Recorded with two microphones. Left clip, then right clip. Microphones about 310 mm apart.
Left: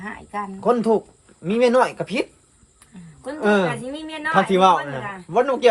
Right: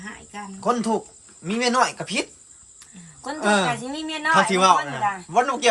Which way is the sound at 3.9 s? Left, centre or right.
Centre.